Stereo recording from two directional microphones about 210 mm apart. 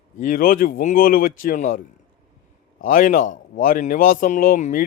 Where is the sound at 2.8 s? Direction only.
40° left (ahead or behind).